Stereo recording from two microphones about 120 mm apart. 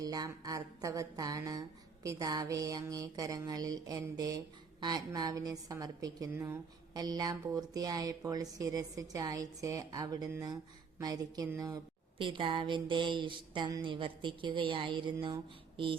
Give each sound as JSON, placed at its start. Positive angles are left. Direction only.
{"t": 0.0, "sound": "speech", "side_deg": -30}
{"t": 6.9, "sound": "speech", "side_deg": -35}
{"t": 12.2, "sound": "a woman's voice", "side_deg": -45}